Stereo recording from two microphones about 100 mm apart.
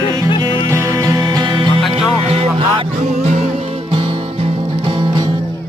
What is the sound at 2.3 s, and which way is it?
Music, 75° right (ahead or behind).